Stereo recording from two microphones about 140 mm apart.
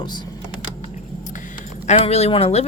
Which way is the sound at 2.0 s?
45° left (ahead or behind).